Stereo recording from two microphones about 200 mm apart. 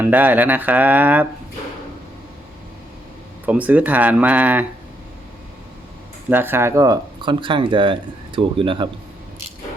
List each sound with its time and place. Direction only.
0.0 s speech: 10° right (ahead or behind)
3.4 s speech: 5° right (ahead or behind)
6.3 s speech: 10° right (ahead or behind)